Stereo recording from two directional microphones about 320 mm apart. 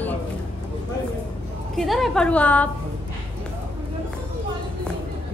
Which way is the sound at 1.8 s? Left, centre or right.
Centre.